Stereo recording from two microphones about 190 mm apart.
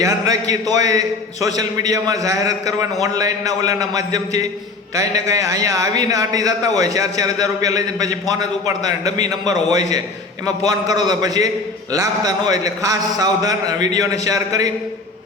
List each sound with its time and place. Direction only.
0.0 s a man's voice: 20° right (ahead or behind)